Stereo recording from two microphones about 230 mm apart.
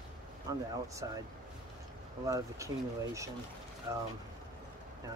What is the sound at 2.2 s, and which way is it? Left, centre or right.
Speech, centre.